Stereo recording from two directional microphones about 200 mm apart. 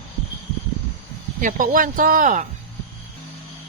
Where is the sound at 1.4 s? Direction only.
40° right (ahead or behind).